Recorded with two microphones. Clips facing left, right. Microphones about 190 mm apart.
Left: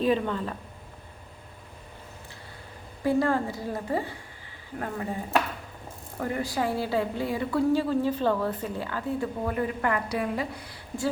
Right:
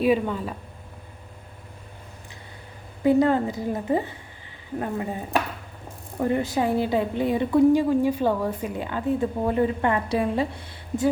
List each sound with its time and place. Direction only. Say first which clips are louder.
0.0 s speech: right 3 dB; 10° right (ahead or behind)
3.0 s a woman's voice: right 5 dB; 20° right (ahead or behind)